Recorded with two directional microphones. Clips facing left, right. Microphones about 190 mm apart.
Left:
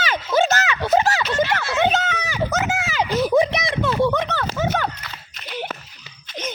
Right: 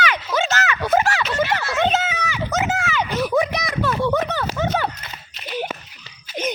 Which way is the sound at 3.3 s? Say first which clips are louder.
Left 2 dB; 25° left (ahead or behind).